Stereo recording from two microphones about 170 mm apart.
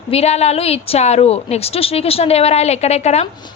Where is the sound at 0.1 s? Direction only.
40° left (ahead or behind).